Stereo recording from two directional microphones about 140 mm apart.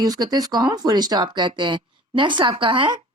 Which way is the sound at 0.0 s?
30° right (ahead or behind).